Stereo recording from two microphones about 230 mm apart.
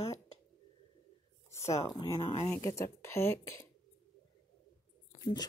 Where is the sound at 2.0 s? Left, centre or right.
Centre.